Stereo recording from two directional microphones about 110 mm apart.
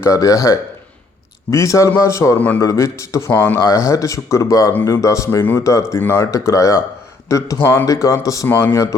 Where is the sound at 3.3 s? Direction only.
20° left (ahead or behind).